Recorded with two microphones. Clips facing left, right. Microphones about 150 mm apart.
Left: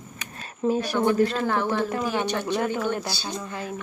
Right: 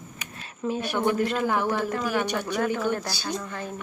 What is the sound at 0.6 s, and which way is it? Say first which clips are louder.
Speech: left 4 dB; 40° left (ahead or behind).